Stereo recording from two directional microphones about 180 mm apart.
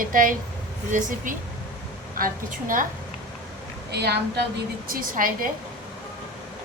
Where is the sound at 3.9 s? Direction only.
65° right (ahead or behind).